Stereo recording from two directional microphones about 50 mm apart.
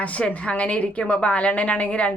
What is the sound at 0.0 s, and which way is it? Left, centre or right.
Speech, left.